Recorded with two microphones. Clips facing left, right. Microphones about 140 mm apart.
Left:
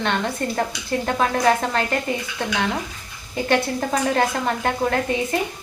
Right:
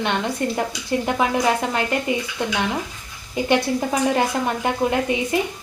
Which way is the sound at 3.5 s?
15° right (ahead or behind).